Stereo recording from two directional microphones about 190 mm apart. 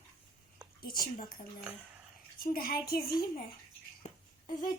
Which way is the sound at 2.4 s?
50° left (ahead or behind).